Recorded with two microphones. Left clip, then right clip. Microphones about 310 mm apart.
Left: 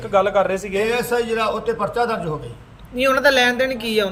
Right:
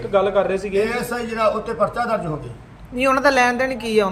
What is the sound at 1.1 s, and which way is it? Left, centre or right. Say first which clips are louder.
Speech: left 4 dB; centre.